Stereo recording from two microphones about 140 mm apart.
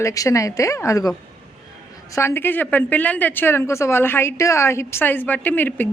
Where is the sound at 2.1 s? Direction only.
15° left (ahead or behind).